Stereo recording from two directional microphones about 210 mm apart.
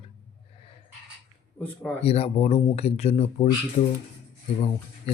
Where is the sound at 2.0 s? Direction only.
30° left (ahead or behind).